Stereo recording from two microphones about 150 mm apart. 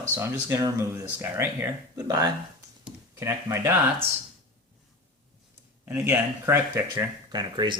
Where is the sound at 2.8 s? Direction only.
15° right (ahead or behind).